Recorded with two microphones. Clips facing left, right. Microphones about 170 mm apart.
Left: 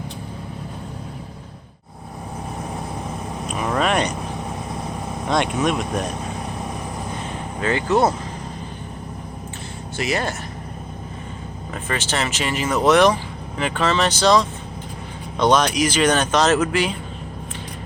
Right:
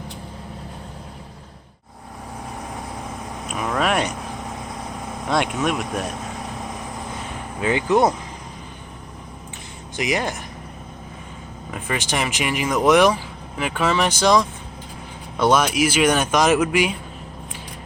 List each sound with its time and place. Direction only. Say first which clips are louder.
3.8 s speech: left 1 dB; 5° right (ahead or behind)
5.3 s speech: left 1 dB; 5° right (ahead or behind)
7.6 s speech: right 1 dB; 15° right (ahead or behind)
10.0 s speech: even; 15° right (ahead or behind)
11.7 s speech: even; 10° right (ahead or behind)